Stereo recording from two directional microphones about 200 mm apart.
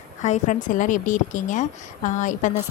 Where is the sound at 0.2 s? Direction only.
35° left (ahead or behind).